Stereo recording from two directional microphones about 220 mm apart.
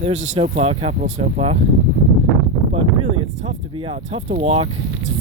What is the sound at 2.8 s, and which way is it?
Speech, 25° right (ahead or behind).